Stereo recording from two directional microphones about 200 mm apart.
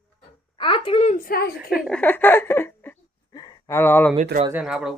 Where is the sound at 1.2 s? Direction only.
50° left (ahead or behind).